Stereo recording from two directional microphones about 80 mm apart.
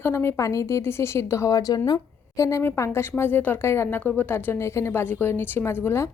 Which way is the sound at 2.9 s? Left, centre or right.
Left.